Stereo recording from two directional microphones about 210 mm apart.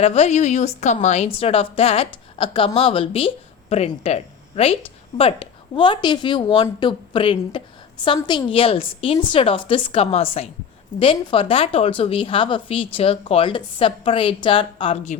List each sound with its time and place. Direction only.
0.0 s a woman's voice: 30° left (ahead or behind)